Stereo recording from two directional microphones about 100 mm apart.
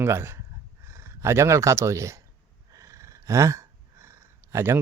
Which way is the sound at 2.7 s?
30° right (ahead or behind).